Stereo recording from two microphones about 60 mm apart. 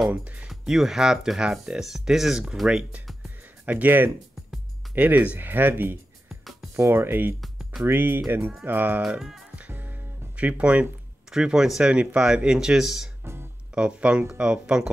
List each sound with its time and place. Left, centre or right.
0.1 s speech: right
0.5 s speech: centre
3.6 s speech: right
6.7 s speech: right
7.4 s music: centre
7.8 s speech: right
9.0 s speech: centre
9.7 s music: right
10.3 s speech: right
11.3 s speech: centre
13.2 s music: right
13.7 s speech: centre